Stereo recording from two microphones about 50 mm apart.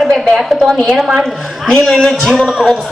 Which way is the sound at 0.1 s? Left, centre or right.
Centre.